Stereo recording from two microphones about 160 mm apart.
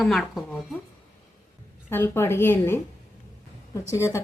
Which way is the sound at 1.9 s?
15° left (ahead or behind).